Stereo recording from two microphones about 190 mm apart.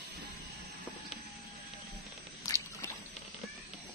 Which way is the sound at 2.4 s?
15° left (ahead or behind).